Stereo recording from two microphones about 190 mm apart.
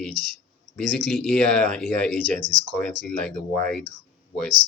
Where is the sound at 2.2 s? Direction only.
45° right (ahead or behind).